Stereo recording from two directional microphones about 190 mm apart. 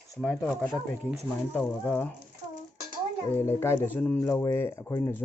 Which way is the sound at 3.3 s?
10° left (ahead or behind).